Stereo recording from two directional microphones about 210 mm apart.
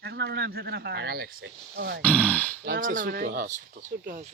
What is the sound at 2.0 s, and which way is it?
Speech, 5° left (ahead or behind).